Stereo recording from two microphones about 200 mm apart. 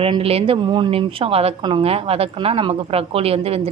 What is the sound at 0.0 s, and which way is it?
Speech, 30° right (ahead or behind).